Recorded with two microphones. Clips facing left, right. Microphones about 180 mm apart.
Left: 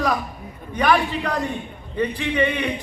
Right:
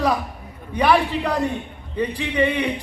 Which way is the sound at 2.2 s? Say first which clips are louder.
Right 2 dB; 30° right (ahead or behind).